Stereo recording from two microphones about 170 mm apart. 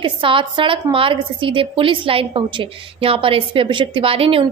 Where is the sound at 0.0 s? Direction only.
30° right (ahead or behind).